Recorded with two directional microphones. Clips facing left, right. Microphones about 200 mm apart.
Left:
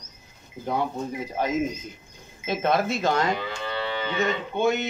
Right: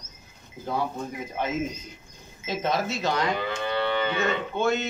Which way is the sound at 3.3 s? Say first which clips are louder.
Right 3 dB; 55° right (ahead or behind).